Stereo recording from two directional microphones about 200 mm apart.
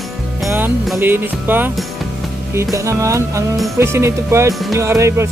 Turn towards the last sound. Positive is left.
turn(degrees=-15)  # may be behind; listen again after turning